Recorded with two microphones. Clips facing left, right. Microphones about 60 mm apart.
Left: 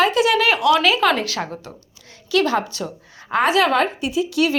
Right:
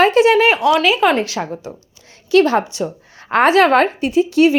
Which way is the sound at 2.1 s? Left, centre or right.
Right.